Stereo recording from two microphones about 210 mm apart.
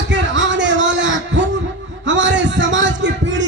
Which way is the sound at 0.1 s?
60° right (ahead or behind).